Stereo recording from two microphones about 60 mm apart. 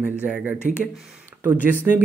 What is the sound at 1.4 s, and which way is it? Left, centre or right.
Speech, right.